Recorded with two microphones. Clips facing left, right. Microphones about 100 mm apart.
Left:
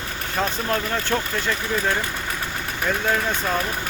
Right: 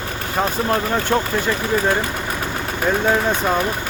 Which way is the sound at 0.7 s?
15° right (ahead or behind).